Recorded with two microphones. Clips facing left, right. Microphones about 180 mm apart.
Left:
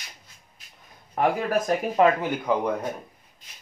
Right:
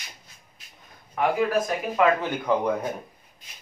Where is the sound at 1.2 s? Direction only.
40° left (ahead or behind).